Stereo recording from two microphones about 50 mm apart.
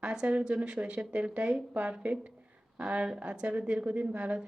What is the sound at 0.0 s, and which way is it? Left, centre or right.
A woman's voice, centre.